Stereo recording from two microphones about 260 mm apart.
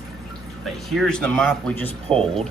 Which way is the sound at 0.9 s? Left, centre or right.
Centre.